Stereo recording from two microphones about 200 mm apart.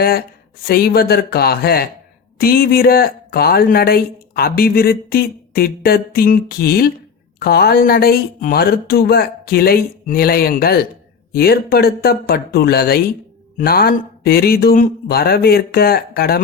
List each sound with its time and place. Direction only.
0.0 s speech: 50° left (ahead or behind)